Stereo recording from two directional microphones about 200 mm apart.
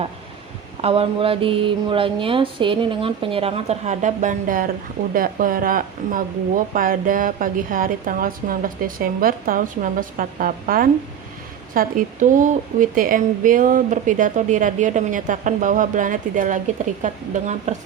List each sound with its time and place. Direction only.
0.8 s a woman's voice: 30° right (ahead or behind)